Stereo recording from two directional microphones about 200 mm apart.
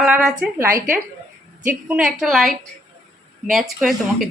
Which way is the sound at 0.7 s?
45° right (ahead or behind).